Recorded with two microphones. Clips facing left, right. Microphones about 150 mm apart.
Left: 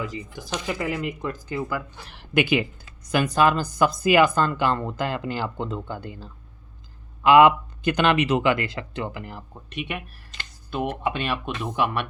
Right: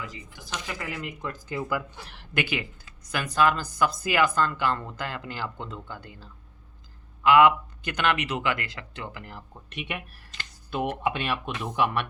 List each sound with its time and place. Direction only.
0.7 s speech: 20° left (ahead or behind)
1.2 s speech: centre (ahead or behind)
2.3 s speech: 20° left (ahead or behind)
9.6 s speech: centre (ahead or behind)